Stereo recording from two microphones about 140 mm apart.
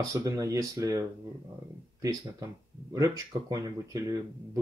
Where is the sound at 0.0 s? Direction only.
25° right (ahead or behind).